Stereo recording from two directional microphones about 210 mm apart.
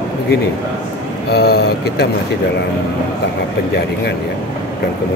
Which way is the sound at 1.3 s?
50° left (ahead or behind).